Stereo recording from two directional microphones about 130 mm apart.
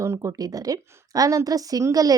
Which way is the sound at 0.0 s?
25° right (ahead or behind).